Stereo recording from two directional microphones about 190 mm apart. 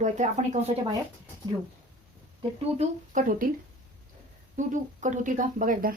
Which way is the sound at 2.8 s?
45° right (ahead or behind).